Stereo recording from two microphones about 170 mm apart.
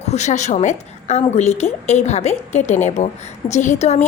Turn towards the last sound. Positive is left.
turn(degrees=40)  # may be behind; listen again after turning